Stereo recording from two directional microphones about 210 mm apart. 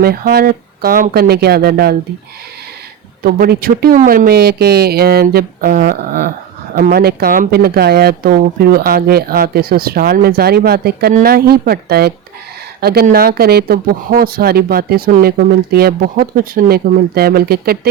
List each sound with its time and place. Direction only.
0.0 s speech: 45° right (ahead or behind)
3.2 s speech: 50° right (ahead or behind)